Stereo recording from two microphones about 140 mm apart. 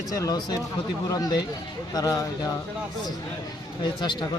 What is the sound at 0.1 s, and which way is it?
Speech, 25° left (ahead or behind).